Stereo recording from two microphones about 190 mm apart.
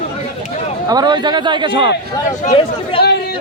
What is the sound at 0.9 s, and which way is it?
A man's voice, 25° right (ahead or behind).